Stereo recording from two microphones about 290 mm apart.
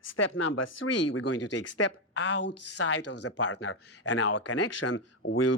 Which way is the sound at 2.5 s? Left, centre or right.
Left.